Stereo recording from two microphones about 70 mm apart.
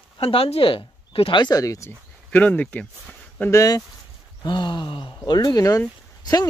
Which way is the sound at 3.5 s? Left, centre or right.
Left.